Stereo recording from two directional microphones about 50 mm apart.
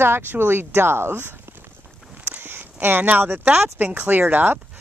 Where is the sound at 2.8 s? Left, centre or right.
Right.